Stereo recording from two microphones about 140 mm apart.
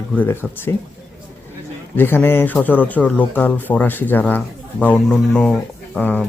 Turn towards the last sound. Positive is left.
turn(degrees=10)  # may be behind; listen again after turning